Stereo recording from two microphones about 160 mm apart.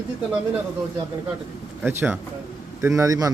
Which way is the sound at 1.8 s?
15° right (ahead or behind).